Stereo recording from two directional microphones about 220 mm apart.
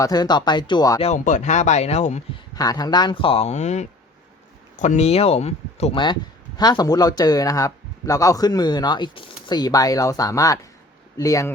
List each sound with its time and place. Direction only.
0.0 s speech: 20° left (ahead or behind)
1.0 s speech: 35° left (ahead or behind)
2.6 s speech: 15° left (ahead or behind)